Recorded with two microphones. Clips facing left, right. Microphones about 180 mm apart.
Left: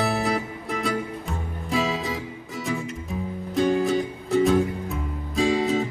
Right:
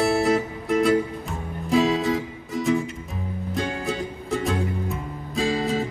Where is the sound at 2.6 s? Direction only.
Centre (ahead or behind).